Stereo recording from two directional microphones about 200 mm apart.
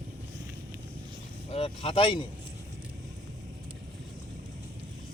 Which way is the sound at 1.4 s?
30° left (ahead or behind).